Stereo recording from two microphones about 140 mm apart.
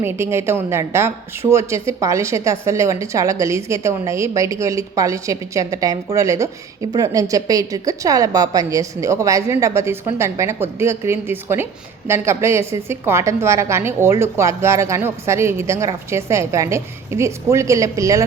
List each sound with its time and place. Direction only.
0.0 s a woman's voice: 15° right (ahead or behind)